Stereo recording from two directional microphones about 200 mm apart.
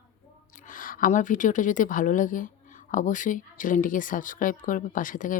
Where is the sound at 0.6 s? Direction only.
45° left (ahead or behind).